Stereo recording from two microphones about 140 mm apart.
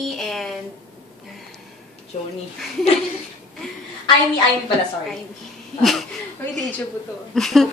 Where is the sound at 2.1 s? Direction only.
50° left (ahead or behind).